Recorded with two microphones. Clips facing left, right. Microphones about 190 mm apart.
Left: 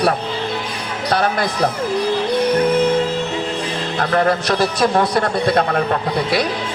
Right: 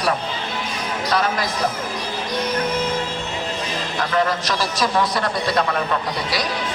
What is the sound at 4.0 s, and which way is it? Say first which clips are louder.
Music: left 4 dB; 60° left (ahead or behind).